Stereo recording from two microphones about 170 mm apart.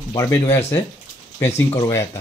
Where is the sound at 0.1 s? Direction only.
20° left (ahead or behind).